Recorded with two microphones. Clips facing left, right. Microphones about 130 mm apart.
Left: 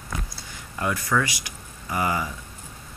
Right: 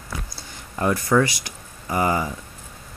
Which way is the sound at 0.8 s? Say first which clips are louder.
Right 6 dB; 35° right (ahead or behind).